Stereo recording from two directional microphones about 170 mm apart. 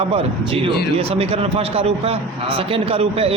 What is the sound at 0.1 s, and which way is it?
A man's voice, 35° right (ahead or behind).